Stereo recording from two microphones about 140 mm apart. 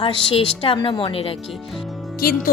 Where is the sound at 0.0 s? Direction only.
40° left (ahead or behind).